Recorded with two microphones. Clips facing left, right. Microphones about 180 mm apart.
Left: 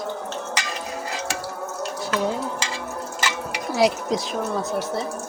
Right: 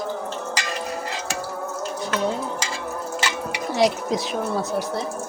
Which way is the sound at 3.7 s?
Centre (ahead or behind).